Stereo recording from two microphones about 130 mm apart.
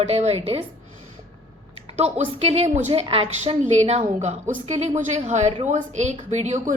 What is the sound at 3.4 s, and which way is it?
A woman's voice, 60° right (ahead or behind).